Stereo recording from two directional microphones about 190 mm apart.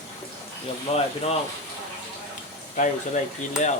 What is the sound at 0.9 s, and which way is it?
Speech, 30° left (ahead or behind).